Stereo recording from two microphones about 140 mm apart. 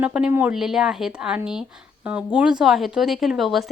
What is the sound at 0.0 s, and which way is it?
A woman's voice, 10° right (ahead or behind).